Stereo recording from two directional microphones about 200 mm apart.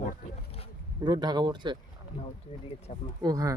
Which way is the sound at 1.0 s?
20° right (ahead or behind).